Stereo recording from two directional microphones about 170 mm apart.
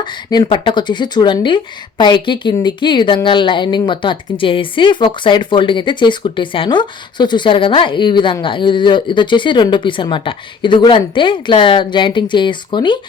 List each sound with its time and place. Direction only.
0.0 s speech: 25° left (ahead or behind)